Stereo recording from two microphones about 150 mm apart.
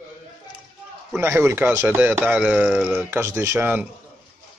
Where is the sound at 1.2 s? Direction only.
15° right (ahead or behind).